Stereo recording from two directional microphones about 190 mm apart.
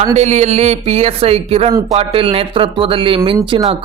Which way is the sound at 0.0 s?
35° right (ahead or behind).